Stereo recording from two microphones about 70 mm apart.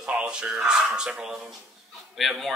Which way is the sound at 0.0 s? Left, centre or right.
Centre.